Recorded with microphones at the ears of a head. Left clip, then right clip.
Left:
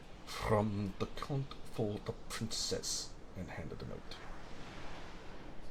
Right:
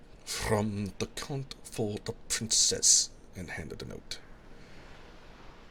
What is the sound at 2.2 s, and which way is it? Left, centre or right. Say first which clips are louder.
Speech: right 15 dB; right.